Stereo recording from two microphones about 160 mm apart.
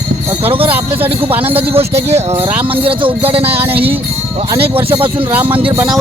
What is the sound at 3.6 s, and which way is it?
Speech, 10° right (ahead or behind).